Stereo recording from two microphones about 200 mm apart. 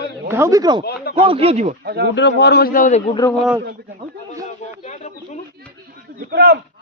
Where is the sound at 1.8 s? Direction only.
55° right (ahead or behind).